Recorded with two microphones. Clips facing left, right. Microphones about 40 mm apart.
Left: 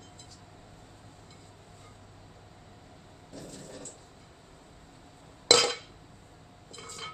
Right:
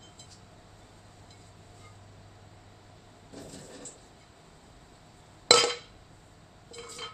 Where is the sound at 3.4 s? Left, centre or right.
Centre.